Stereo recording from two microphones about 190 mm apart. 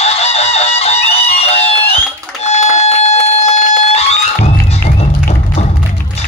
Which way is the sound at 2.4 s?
35° left (ahead or behind).